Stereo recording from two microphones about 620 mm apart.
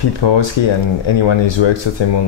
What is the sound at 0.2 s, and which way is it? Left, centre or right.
Speech, left.